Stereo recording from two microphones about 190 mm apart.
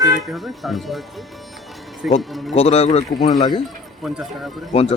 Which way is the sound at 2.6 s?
35° left (ahead or behind).